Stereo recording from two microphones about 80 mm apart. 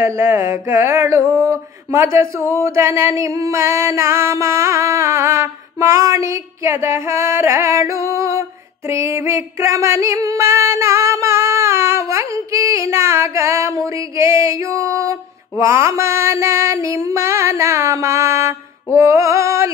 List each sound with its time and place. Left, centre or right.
0.0 s music: right